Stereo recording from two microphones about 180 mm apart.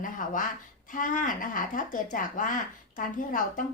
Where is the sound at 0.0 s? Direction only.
50° left (ahead or behind).